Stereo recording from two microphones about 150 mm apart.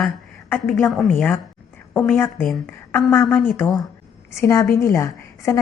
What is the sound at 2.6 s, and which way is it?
Speech, 10° left (ahead or behind).